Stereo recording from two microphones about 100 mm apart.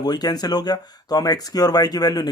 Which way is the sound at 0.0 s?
40° left (ahead or behind).